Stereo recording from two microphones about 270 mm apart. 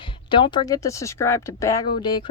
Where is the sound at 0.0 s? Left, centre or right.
Centre.